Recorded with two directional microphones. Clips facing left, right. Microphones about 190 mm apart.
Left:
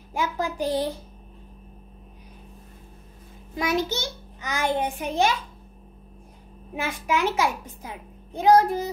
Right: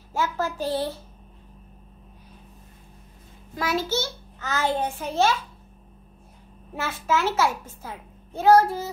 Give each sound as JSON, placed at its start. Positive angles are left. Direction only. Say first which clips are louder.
{"t": 0.1, "sound": "a child's voice", "louder": "right 1 dB", "side_deg": 15}
{"t": 3.5, "sound": "a child's voice", "louder": "even", "side_deg": 15}
{"t": 6.7, "sound": "a child's voice", "louder": "right 1 dB", "side_deg": 15}